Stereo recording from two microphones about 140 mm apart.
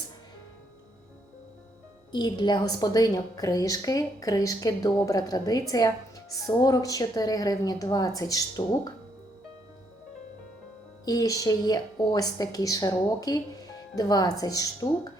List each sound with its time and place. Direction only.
2.1 s a woman's voice: 30° left (ahead or behind)
11.0 s a woman's voice: 25° left (ahead or behind)